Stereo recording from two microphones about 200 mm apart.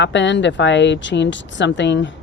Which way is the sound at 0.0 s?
65° left (ahead or behind).